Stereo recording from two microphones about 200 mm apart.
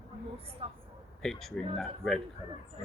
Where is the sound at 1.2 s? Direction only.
Centre (ahead or behind).